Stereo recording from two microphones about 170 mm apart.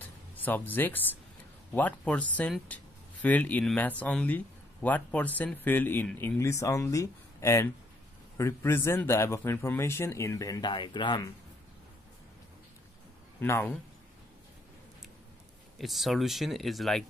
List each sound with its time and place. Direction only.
0.0 s music: 10° left (ahead or behind)
1.7 s speech: 10° left (ahead or behind); by 11.2 s 25° left (ahead or behind)
13.4 s speech: 10° left (ahead or behind)
15.8 s speech: centre (ahead or behind)